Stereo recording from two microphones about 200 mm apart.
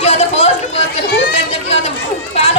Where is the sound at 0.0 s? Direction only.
30° left (ahead or behind).